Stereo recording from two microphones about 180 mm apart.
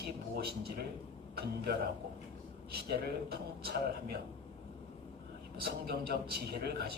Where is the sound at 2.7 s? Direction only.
60° right (ahead or behind).